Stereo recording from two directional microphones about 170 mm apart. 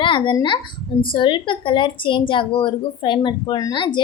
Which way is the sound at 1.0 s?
30° left (ahead or behind).